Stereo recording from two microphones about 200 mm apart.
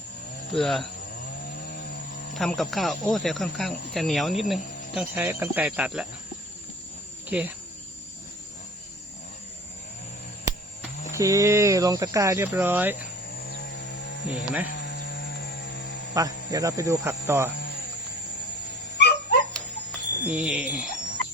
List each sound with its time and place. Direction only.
0.5 s speech: centre (ahead or behind)
1.5 s chainsaw: 45° left (ahead or behind)
2.3 s speech: centre (ahead or behind)
7.3 s cricket: 5° right (ahead or behind)
11.1 s speech: 15° right (ahead or behind)
13.3 s chainsaw: 50° left (ahead or behind)
14.3 s speech: 10° right (ahead or behind)
14.7 s a sound: 55° left (ahead or behind)
16.1 s speech: 15° right (ahead or behind)
18.9 s dog: 55° left (ahead or behind)
20.3 s speech: 5° right (ahead or behind)